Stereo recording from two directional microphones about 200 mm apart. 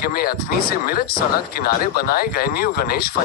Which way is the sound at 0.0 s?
50° left (ahead or behind).